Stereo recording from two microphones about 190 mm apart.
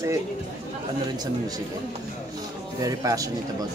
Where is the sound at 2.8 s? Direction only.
20° right (ahead or behind).